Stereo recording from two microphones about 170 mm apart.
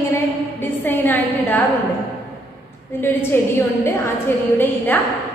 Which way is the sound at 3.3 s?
10° left (ahead or behind).